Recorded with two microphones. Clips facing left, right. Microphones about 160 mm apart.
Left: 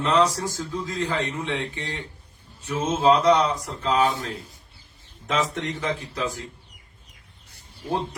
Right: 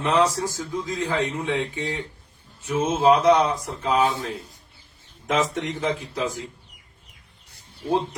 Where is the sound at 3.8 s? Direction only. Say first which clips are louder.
Even; 15° right (ahead or behind).